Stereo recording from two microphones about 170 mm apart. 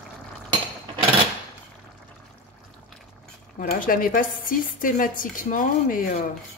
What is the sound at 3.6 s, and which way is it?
A woman's voice, 55° left (ahead or behind).